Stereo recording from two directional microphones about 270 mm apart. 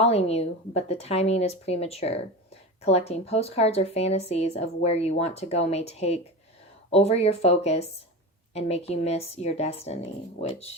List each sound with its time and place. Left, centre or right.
0.0 s a woman's voice: left